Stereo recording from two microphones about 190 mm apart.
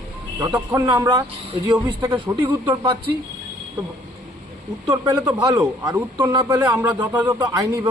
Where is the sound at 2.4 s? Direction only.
10° right (ahead or behind).